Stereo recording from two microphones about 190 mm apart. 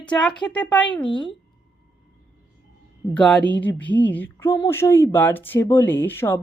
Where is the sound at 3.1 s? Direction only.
5° left (ahead or behind).